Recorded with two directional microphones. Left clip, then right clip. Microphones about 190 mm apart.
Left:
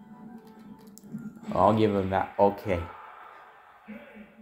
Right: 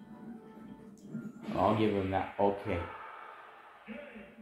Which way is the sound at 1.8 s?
60° left (ahead or behind).